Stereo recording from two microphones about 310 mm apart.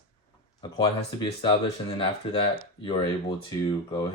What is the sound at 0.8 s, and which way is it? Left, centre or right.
Speech, centre.